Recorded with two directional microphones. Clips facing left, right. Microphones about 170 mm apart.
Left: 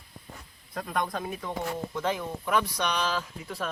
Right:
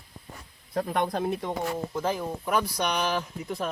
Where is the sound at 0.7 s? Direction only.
30° right (ahead or behind).